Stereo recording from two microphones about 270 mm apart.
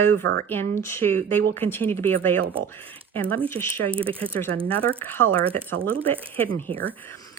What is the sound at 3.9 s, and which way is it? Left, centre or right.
Speech, right.